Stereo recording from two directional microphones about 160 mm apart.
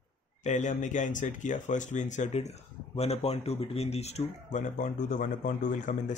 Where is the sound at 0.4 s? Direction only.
50° left (ahead or behind).